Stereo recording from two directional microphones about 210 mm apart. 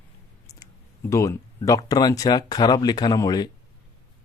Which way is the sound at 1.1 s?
15° left (ahead or behind).